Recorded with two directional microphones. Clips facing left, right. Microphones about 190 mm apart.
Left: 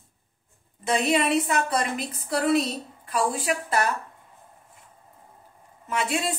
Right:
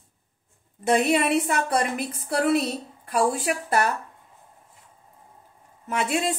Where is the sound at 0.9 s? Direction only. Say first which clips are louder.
Right 2 dB; 55° right (ahead or behind).